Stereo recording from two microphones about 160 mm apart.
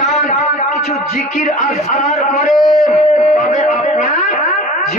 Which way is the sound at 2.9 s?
45° left (ahead or behind).